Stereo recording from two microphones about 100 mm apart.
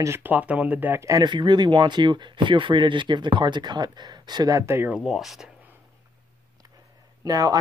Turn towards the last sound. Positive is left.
turn(degrees=-40)  # may be behind; listen again after turning